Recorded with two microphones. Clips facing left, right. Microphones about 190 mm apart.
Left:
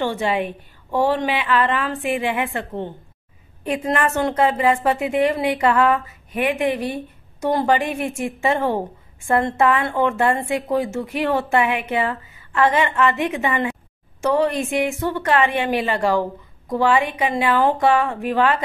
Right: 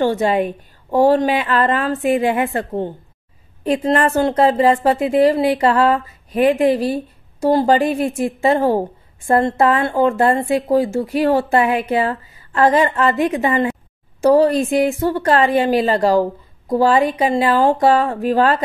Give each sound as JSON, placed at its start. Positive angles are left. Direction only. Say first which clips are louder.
{"t": 0.0, "sound": "a woman's voice", "louder": "right 5 dB", "side_deg": -40}